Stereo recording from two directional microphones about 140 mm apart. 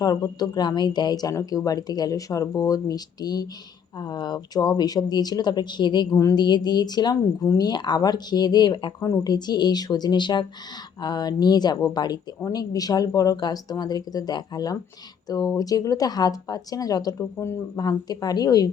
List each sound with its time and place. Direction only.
0.0 s a woman's voice: 25° left (ahead or behind)